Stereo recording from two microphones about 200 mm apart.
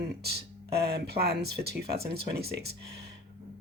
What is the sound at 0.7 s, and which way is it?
Speech, 55° right (ahead or behind).